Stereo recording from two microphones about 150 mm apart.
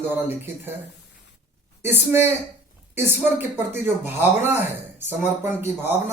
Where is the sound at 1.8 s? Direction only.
15° right (ahead or behind).